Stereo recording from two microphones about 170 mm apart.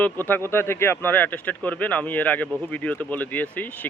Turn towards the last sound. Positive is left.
turn(degrees=10)  # may be behind; listen again after turning